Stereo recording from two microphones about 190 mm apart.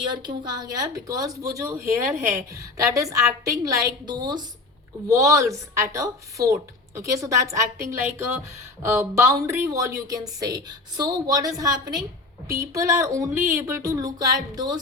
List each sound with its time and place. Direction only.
0.0 s a woman's voice: 25° right (ahead or behind)